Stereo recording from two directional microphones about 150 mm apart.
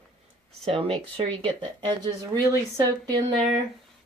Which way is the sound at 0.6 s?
40° right (ahead or behind).